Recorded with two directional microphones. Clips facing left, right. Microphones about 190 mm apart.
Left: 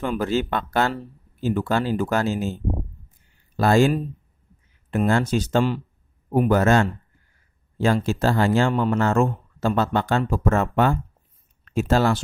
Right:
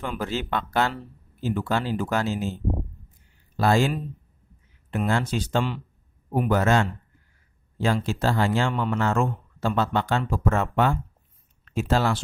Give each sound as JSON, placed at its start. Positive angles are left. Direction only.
{"t": 0.0, "sound": "speech", "side_deg": 45}
{"t": 3.5, "sound": "speech", "side_deg": 50}